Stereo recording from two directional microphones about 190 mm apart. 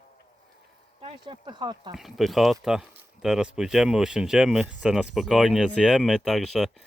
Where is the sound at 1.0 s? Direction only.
25° right (ahead or behind).